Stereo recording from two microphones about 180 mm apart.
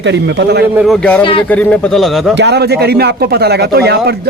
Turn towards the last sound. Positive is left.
turn(degrees=-65)  # may be behind; listen again after turning